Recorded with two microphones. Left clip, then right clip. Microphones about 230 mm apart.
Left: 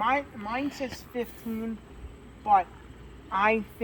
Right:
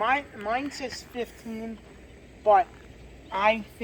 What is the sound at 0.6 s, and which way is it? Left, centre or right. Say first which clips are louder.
Speech: left 1 dB; left.